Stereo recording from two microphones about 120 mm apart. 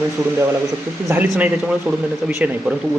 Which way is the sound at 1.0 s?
20° right (ahead or behind).